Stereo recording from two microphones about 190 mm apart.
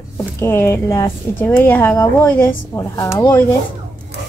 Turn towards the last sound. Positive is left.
turn(degrees=15)  # may be behind; listen again after turning